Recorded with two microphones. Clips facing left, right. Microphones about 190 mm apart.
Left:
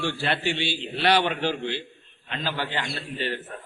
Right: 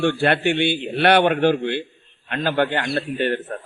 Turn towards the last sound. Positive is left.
turn(degrees=-55)  # may be behind; listen again after turning